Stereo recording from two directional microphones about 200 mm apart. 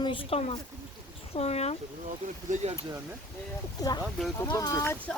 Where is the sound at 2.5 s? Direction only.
40° right (ahead or behind).